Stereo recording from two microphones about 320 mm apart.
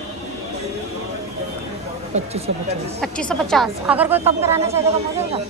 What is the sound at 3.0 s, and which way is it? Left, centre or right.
A woman's voice, centre.